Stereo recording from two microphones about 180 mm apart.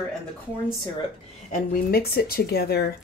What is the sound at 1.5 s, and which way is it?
Speech, 60° left (ahead or behind).